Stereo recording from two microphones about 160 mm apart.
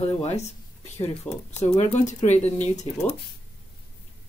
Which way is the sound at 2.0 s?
45° left (ahead or behind).